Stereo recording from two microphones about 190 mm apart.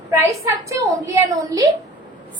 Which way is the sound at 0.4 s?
15° right (ahead or behind).